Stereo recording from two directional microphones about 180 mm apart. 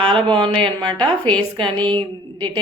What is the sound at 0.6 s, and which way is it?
A woman's voice, 25° right (ahead or behind).